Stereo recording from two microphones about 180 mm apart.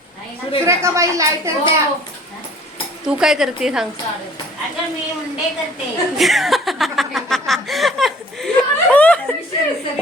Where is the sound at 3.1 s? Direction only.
5° right (ahead or behind).